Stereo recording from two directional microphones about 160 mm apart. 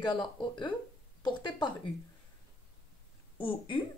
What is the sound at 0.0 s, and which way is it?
Speech, 30° left (ahead or behind).